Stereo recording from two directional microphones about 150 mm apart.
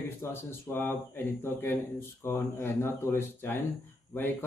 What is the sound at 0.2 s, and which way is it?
Speech, 15° left (ahead or behind).